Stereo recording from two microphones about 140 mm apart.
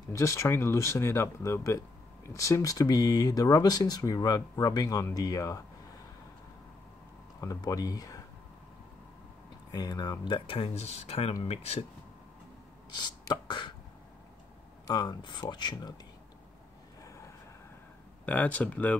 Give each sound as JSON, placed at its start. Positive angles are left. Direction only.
{"t": 0.1, "sound": "speech", "side_deg": 20}
{"t": 7.3, "sound": "speech", "side_deg": 25}
{"t": 9.7, "sound": "speech", "side_deg": 30}
{"t": 13.3, "sound": "speech", "side_deg": 30}
{"t": 14.9, "sound": "speech", "side_deg": 30}
{"t": 18.2, "sound": "speech", "side_deg": 10}